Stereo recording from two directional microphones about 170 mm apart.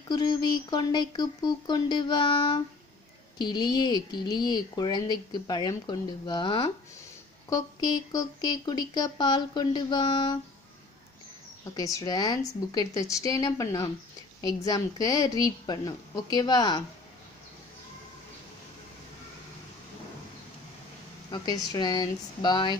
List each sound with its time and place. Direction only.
0.1 s a woman's voice: 25° left (ahead or behind)
11.6 s a woman's voice: 20° left (ahead or behind)
21.3 s a woman's voice: 25° left (ahead or behind)